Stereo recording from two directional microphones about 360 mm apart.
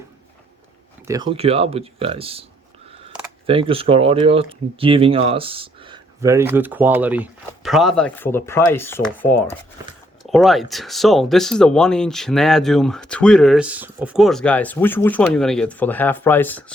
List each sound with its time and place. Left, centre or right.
1.0 s speech: centre